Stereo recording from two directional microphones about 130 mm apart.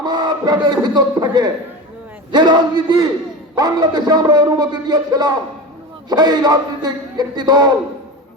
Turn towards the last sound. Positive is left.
turn(degrees=-30)  # may be behind; listen again after turning